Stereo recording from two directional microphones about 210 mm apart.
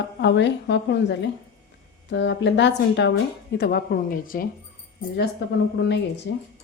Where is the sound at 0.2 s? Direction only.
55° left (ahead or behind).